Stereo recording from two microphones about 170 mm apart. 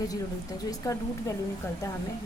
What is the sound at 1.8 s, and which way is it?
Speech, 20° left (ahead or behind).